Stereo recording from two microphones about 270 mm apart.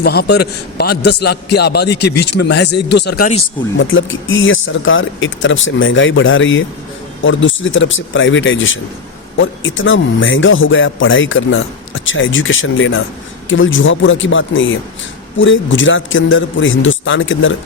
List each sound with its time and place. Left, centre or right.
0.0 s a man's voice: left